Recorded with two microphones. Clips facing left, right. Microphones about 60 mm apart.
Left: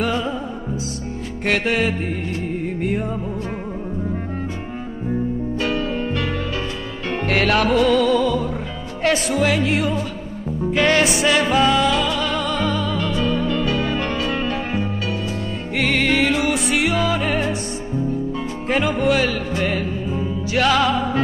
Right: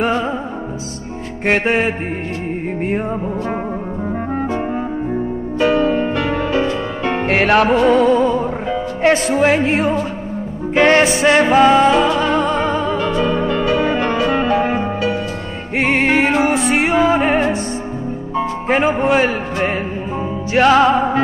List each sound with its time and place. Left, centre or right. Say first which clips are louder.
0.0 s music: right 4 dB; right
1.4 s music: right 4 dB; right
5.6 s music: right 11 dB; right
18.7 s music: right 3 dB; right